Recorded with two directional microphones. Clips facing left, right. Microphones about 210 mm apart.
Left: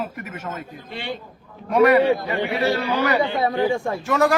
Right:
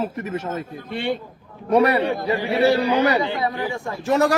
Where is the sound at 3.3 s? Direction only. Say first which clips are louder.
Left 4 dB; 25° left (ahead or behind).